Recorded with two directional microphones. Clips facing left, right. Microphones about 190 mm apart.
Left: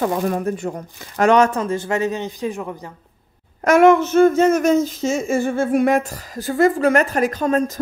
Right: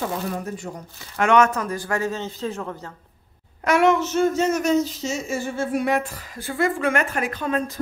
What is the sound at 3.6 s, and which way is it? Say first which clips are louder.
Speech: left 6 dB; 50° left (ahead or behind).